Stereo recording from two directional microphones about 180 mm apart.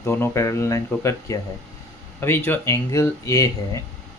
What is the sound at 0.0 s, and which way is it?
Speech, 15° left (ahead or behind).